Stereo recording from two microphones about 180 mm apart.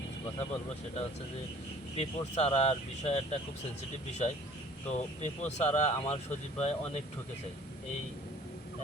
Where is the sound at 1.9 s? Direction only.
35° left (ahead or behind).